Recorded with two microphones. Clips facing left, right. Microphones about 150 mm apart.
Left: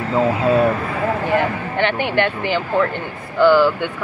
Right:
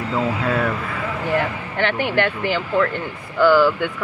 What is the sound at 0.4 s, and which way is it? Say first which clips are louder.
Speech: left 6 dB; 25° left (ahead or behind).